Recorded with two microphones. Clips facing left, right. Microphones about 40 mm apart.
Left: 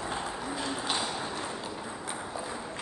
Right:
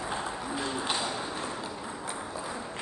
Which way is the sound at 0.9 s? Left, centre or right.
Centre.